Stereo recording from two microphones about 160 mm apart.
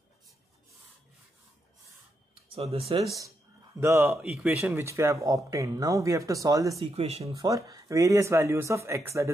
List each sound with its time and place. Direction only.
2.5 s speech: 40° right (ahead or behind)
3.8 s speech: 15° right (ahead or behind)
4.3 s speech: 5° right (ahead or behind)
4.8 s speech: 20° right (ahead or behind)
6.8 s speech: 40° right (ahead or behind)
7.4 s speech: 20° right (ahead or behind)